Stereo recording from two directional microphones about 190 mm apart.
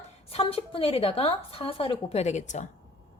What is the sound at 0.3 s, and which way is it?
Speech, 30° left (ahead or behind).